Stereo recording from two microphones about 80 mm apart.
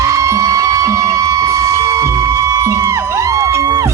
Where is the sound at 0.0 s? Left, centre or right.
Right.